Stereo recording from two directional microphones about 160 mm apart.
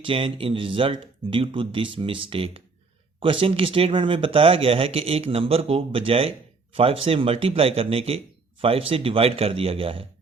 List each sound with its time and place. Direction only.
0.0 s speech: 35° right (ahead or behind)